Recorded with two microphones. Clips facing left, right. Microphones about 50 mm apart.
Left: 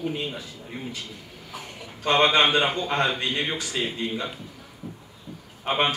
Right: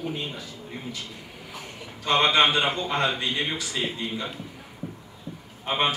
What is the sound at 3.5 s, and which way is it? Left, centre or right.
Speech, left.